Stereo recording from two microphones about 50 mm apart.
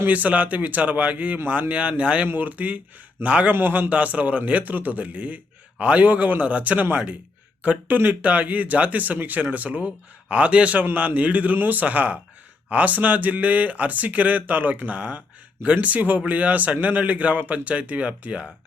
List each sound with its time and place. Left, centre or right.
0.1 s a man's voice: right
2.2 s a man's voice: right
3.5 s a man's voice: right